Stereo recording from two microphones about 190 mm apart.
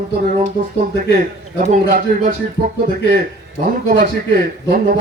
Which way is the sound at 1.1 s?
45° right (ahead or behind).